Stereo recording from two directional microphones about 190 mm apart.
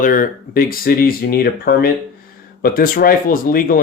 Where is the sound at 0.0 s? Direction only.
45° left (ahead or behind).